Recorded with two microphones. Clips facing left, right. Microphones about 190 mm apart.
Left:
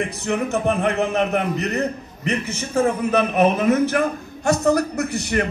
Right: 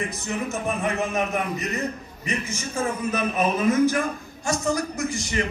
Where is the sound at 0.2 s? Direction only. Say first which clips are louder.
Left 6 dB; 60° left (ahead or behind).